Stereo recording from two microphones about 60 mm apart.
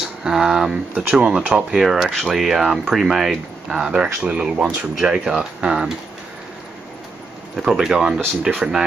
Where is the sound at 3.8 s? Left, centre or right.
Centre.